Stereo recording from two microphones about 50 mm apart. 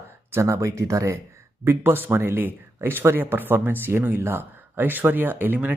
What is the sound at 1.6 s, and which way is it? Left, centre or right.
Speech, right.